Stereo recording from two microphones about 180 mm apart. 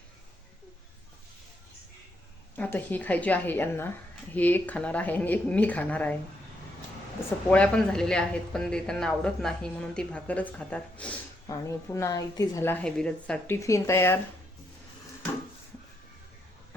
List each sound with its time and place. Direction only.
2.6 s a woman's voice: 10° left (ahead or behind)
7.5 s a woman's voice: 5° left (ahead or behind)
13.6 s a woman's voice: 15° left (ahead or behind)